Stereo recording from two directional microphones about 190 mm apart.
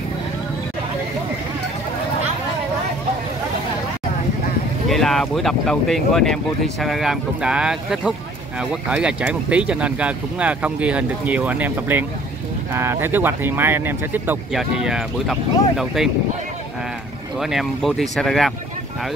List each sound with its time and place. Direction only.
4.8 s speech: centre (ahead or behind)
17.4 s speech: centre (ahead or behind)